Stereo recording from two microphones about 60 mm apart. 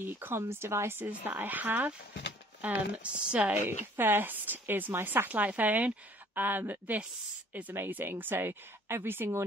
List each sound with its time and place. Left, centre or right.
0.0 s a woman's voice: right
0.4 s a woman's voice: right
3.5 s a woman's voice: right